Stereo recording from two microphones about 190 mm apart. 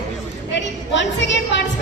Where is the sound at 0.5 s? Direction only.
70° left (ahead or behind).